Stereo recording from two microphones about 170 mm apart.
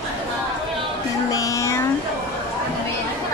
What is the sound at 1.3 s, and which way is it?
Child singing, 20° left (ahead or behind).